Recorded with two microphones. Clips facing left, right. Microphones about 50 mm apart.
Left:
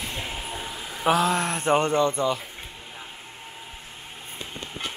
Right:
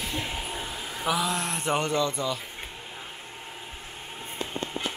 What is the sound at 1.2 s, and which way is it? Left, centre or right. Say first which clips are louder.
Speech: left 5 dB; left.